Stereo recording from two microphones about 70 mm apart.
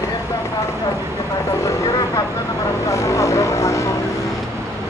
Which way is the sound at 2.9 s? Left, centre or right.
Left.